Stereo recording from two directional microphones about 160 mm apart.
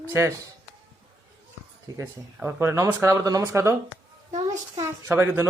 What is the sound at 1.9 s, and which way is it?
Speech, 15° right (ahead or behind).